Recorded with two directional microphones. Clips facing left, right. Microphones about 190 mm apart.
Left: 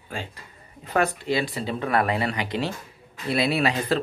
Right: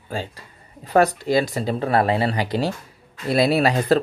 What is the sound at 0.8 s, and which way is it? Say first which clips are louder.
Speech: right 6 dB; 35° right (ahead or behind).